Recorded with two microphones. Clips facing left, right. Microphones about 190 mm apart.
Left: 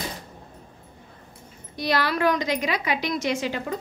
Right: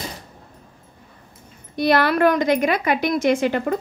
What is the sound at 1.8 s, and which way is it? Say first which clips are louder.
A woman's voice: right 7 dB; 55° right (ahead or behind).